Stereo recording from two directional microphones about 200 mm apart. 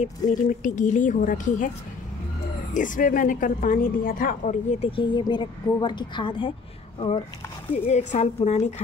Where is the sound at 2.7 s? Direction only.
40° left (ahead or behind); by 6.5 s 25° left (ahead or behind).